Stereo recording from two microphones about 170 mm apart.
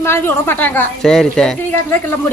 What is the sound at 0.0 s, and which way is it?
A woman's voice, 15° left (ahead or behind).